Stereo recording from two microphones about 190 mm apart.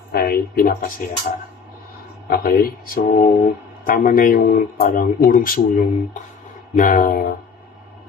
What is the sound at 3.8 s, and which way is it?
Speech, 45° left (ahead or behind).